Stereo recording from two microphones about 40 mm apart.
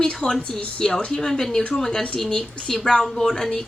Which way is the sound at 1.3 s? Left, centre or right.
Centre.